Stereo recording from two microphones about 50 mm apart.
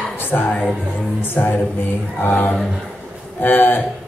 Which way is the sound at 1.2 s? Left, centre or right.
Left.